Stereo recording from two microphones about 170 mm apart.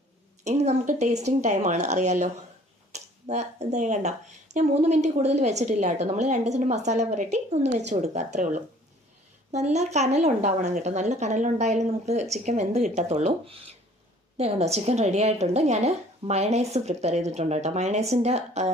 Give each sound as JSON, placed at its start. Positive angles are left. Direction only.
{"t": 0.4, "sound": "a woman's voice", "side_deg": -40}